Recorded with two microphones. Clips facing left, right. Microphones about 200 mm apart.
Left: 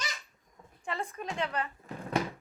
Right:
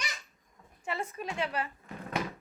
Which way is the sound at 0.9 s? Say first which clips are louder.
Even; 10° right (ahead or behind).